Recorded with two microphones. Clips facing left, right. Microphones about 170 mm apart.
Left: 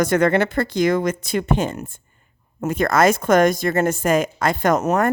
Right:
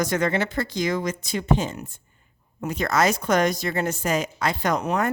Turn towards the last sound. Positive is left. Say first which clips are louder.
# left 6 dB
turn(degrees=45)  # may be behind; listen again after turning